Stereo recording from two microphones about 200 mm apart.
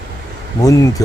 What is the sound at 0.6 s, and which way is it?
Speech, 15° left (ahead or behind).